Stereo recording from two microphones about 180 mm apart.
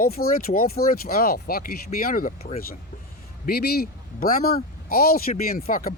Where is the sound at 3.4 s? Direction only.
60° left (ahead or behind).